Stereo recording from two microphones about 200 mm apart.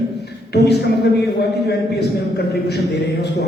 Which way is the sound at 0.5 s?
55° left (ahead or behind).